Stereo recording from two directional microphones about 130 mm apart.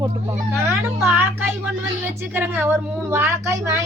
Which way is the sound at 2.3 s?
15° right (ahead or behind).